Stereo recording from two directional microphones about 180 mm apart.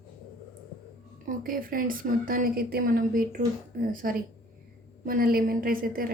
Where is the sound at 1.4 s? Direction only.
50° right (ahead or behind).